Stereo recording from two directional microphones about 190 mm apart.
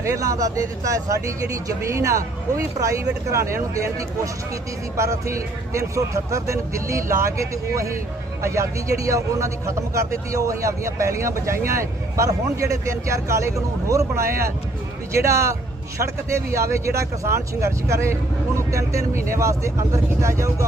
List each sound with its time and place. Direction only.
0.0 s speech: 15° right (ahead or behind)
4.9 s speech: 15° right (ahead or behind)
8.4 s speech: 15° right (ahead or behind)
14.2 s speech: 50° right (ahead or behind)
15.1 s speech: 15° right (ahead or behind)
19.3 s speech: 15° right (ahead or behind)